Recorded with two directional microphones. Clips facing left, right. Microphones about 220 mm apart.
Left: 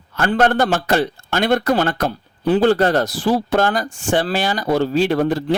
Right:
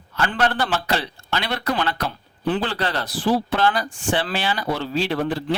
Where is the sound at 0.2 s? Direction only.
45° left (ahead or behind).